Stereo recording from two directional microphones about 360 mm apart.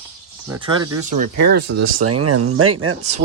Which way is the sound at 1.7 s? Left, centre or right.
Right.